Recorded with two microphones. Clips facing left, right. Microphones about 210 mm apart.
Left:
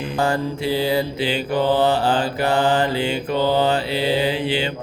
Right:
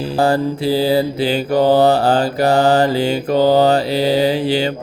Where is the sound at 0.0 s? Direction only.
35° right (ahead or behind).